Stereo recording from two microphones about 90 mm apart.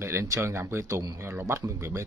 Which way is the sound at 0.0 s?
30° right (ahead or behind).